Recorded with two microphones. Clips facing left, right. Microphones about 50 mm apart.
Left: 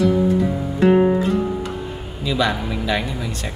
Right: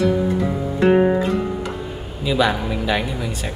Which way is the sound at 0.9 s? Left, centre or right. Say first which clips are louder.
Even; centre.